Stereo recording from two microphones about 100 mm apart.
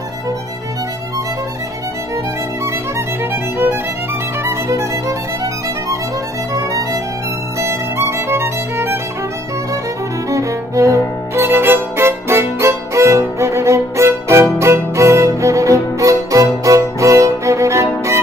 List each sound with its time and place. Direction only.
4.5 s music: 30° right (ahead or behind)
6.5 s music: 35° right (ahead or behind)
7.6 s violin: 25° right (ahead or behind)
10.3 s music: 30° right (ahead or behind)